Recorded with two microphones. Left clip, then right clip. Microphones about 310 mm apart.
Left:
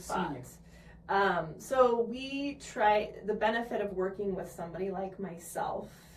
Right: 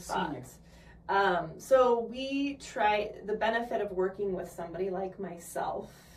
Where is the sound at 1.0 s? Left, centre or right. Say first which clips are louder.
Right 1 dB; centre.